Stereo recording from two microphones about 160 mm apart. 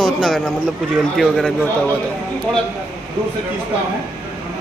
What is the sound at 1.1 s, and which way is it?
Speech, centre (ahead or behind).